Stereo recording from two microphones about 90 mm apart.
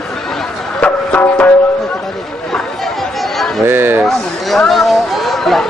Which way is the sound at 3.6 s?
25° right (ahead or behind).